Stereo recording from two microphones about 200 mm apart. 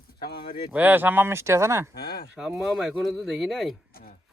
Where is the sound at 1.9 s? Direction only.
50° left (ahead or behind).